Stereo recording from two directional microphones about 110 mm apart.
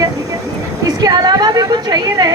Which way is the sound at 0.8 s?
35° right (ahead or behind).